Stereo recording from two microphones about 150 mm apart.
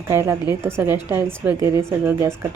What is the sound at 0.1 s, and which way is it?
Speech, 15° right (ahead or behind).